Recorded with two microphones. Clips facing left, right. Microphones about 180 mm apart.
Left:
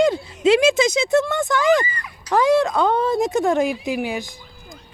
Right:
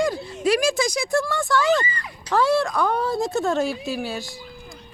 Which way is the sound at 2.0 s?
25° right (ahead or behind).